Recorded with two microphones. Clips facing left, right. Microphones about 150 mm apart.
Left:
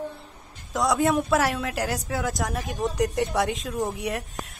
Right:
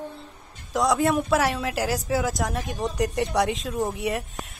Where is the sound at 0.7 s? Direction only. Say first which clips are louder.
Right 1 dB; centre (ahead or behind).